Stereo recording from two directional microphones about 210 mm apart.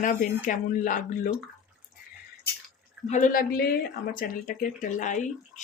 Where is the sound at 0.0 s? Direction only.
40° left (ahead or behind).